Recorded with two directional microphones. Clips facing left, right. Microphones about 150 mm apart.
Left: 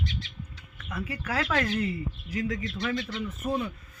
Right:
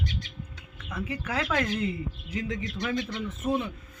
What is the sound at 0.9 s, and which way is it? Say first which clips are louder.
Speech: even; 20° right (ahead or behind).